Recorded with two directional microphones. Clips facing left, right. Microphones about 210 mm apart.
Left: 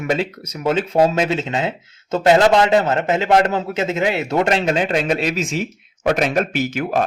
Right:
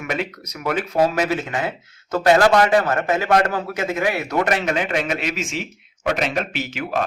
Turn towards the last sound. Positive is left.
turn(degrees=45)  # may be behind; listen again after turning